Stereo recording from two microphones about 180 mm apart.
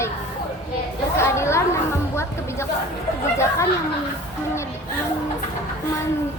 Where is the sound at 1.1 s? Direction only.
15° left (ahead or behind).